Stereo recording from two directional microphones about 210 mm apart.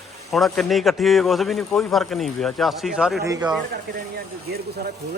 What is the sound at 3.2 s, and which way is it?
Speech, 15° right (ahead or behind).